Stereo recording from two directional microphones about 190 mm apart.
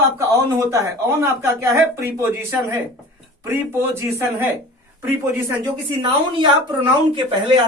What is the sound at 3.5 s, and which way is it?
A man's voice, 15° right (ahead or behind).